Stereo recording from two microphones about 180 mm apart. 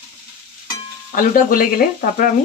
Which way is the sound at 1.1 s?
50° left (ahead or behind).